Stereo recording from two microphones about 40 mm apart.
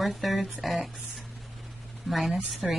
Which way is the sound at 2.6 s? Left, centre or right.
Centre.